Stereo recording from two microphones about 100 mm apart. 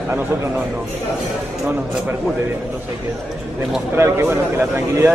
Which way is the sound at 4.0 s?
25° right (ahead or behind).